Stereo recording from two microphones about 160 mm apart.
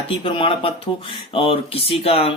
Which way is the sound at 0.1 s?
35° left (ahead or behind).